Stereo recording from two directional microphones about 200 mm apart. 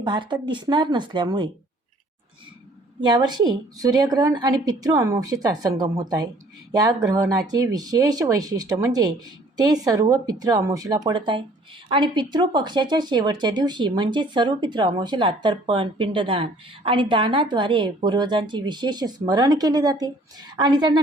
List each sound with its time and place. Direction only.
0.0 s speech: 25° right (ahead or behind)
3.0 s speech: 20° right (ahead or behind)